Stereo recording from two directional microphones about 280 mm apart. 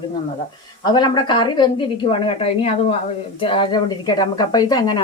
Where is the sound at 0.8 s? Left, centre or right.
Centre.